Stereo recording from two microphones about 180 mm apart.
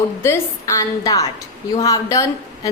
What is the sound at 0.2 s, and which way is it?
A woman's voice, 15° left (ahead or behind).